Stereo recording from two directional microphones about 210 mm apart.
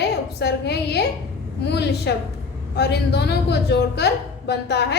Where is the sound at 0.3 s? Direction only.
55° left (ahead or behind).